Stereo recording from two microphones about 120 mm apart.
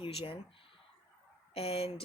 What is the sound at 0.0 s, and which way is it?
Speech, 50° left (ahead or behind).